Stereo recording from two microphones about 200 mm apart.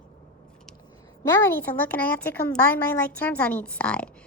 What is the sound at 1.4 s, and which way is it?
A woman's voice, 10° left (ahead or behind).